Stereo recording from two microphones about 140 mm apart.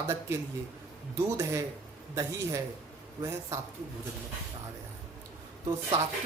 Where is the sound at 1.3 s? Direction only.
25° right (ahead or behind).